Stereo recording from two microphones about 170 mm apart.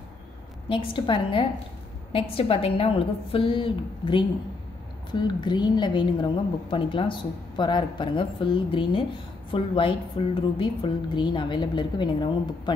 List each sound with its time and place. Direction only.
0.7 s a woman's voice: 30° left (ahead or behind)